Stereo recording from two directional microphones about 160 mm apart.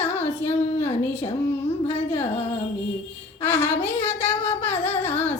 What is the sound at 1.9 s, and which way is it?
Music, 40° left (ahead or behind).